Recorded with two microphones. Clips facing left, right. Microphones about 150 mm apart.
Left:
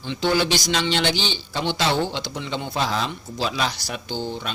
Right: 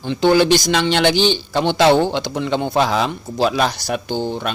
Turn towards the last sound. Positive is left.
turn(degrees=-55)  # may be behind; listen again after turning